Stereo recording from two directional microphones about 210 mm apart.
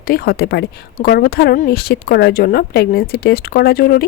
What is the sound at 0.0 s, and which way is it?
Speech, 45° left (ahead or behind).